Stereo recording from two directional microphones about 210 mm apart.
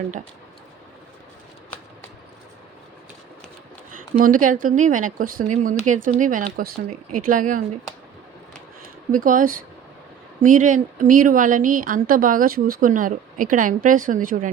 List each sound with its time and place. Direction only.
4.2 s speech: 40° right (ahead or behind)
9.1 s speech: 40° right (ahead or behind)